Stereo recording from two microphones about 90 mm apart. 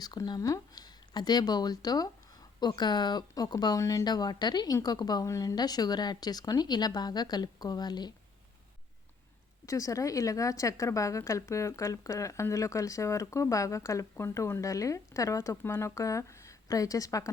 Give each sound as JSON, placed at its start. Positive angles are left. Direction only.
{"t": 0.0, "sound": "speech", "side_deg": 50}
{"t": 9.6, "sound": "a woman's voice", "side_deg": 40}